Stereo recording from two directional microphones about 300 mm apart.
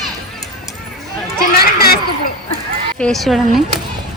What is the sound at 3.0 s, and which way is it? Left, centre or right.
Speech, centre.